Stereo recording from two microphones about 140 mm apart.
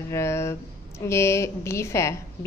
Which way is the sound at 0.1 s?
20° left (ahead or behind).